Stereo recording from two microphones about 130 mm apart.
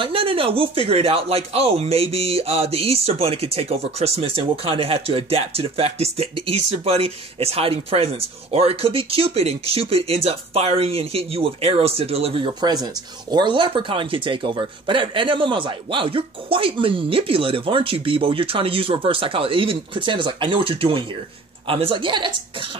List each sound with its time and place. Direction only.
0.0 s speech: 45° right (ahead or behind)
12.5 s speech: 30° right (ahead or behind)